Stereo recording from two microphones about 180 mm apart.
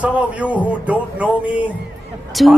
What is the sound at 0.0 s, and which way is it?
Speech, 5° right (ahead or behind).